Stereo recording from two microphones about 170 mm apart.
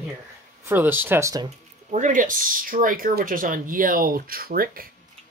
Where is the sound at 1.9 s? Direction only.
45° right (ahead or behind).